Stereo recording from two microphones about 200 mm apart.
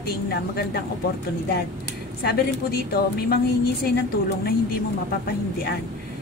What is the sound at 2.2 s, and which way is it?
A woman's voice, 50° left (ahead or behind).